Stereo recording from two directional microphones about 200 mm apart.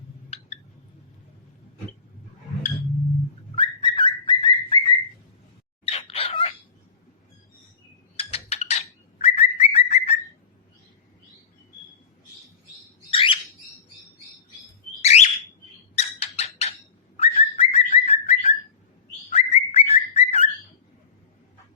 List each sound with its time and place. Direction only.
3.5 s bird: 25° left (ahead or behind)
8.1 s bird: 30° left (ahead or behind)
13.1 s bird: 25° left (ahead or behind)
15.0 s bird: 35° left (ahead or behind)
16.0 s a sound: 30° left (ahead or behind)
17.2 s bird: 30° left (ahead or behind)